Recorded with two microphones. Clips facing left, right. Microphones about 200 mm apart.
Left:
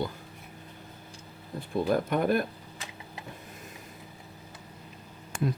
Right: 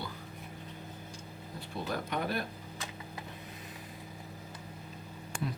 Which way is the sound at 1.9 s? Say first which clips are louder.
Left 9 dB; 50° left (ahead or behind).